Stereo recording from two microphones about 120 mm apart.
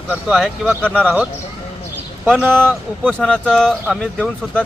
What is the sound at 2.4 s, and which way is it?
Speech, 15° right (ahead or behind).